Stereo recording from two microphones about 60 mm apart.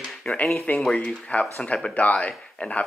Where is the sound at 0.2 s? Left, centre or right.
Centre.